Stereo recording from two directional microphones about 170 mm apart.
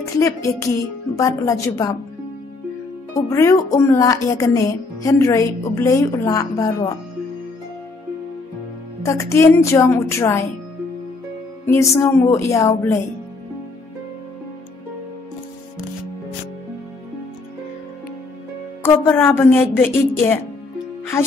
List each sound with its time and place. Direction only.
0.2 s a woman's voice: 20° left (ahead or behind)
3.2 s speech: 20° left (ahead or behind)
9.0 s a woman's voice: 15° left (ahead or behind)
11.6 s a woman's voice: 15° left (ahead or behind)
18.8 s a woman's voice: 15° left (ahead or behind)